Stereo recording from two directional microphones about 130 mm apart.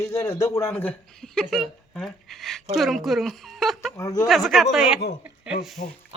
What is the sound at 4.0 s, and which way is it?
Speech, 30° left (ahead or behind).